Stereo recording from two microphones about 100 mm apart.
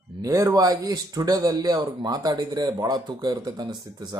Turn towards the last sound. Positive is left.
turn(degrees=-45)  # may be behind; listen again after turning